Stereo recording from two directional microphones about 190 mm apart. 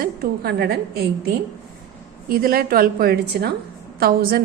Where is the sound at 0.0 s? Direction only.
55° right (ahead or behind).